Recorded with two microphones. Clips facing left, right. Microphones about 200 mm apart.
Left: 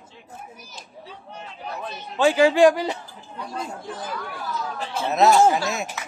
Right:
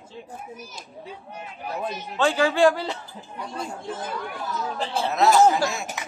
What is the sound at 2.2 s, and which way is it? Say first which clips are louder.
Speech: left 4 dB; 15° left (ahead or behind).